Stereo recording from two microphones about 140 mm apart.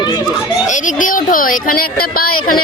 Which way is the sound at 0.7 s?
70° left (ahead or behind).